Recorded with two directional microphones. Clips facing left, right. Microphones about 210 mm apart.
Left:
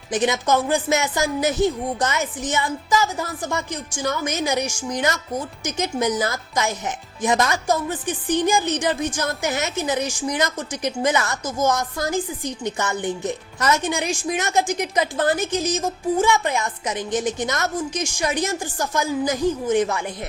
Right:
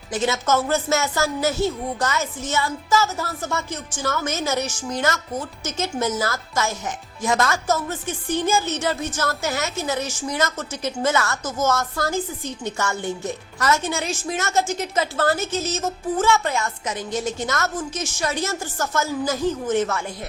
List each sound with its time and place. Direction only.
0.1 s speech: 15° left (ahead or behind)